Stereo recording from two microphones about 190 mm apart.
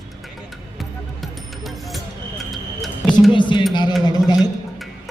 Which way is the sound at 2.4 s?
Centre (ahead or behind).